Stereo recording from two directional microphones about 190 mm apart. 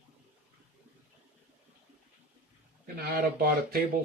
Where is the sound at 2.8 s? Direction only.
50° right (ahead or behind).